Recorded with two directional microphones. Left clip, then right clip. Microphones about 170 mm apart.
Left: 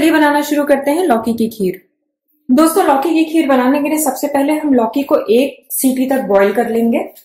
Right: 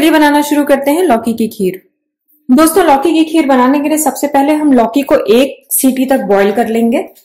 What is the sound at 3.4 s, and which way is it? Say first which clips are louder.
A woman's voice: right 3 dB; 55° right (ahead or behind).